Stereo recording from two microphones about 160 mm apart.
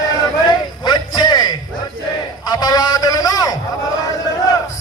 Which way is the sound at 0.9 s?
25° left (ahead or behind).